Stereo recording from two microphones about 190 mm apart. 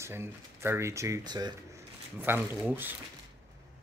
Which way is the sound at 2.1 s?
10° right (ahead or behind).